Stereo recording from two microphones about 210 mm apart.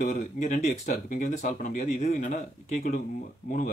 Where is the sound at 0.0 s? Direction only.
35° left (ahead or behind).